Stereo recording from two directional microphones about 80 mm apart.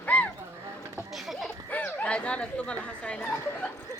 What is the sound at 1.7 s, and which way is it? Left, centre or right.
Speech, left.